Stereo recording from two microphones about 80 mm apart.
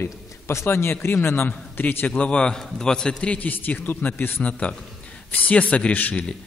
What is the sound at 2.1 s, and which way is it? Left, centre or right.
A man's voice, centre.